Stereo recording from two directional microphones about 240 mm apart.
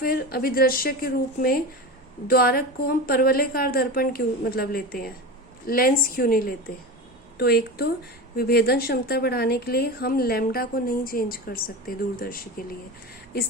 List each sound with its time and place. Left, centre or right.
0.0 s a woman's voice: left